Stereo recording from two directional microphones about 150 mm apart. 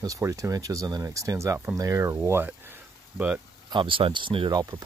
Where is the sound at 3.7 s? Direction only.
35° right (ahead or behind).